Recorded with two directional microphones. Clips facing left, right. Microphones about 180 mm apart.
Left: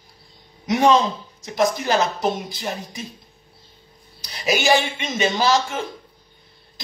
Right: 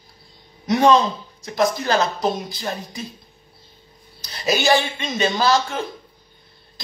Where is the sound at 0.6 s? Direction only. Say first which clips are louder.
Right 1 dB; 15° left (ahead or behind).